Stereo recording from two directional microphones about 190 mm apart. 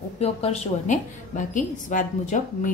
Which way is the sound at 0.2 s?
35° left (ahead or behind).